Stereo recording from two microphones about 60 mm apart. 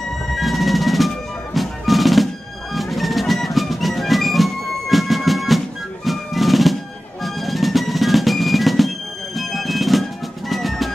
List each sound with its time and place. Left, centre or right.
0.3 s music: centre
7.2 s drum: centre
10.5 s music: centre